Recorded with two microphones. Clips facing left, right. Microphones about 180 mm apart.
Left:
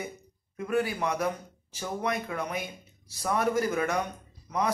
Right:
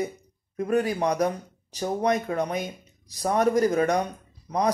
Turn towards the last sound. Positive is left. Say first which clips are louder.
# right 4 dB
turn(degrees=-35)  # may be behind; listen again after turning